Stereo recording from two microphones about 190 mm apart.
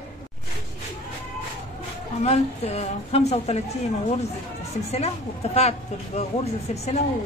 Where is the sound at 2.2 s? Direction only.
35° left (ahead or behind).